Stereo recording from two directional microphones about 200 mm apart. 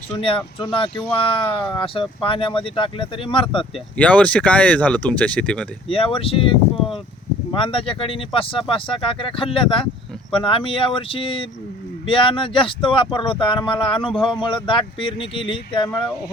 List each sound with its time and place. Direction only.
0.2 s speech: 25° left (ahead or behind)
3.9 s speech: 5° left (ahead or behind)
5.9 s speech: 25° left (ahead or behind)